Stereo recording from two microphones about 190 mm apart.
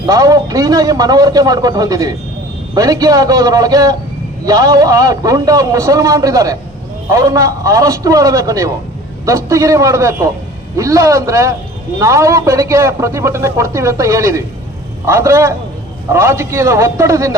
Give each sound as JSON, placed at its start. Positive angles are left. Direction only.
{"t": 0.0, "sound": "a man's voice", "side_deg": -20}